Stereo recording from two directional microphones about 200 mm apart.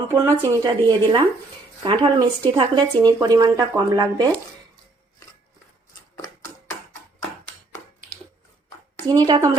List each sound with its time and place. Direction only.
0.1 s speech: 15° right (ahead or behind)
9.0 s speech: 20° right (ahead or behind)